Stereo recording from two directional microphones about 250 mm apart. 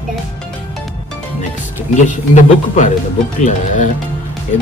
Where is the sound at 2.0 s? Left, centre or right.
Left.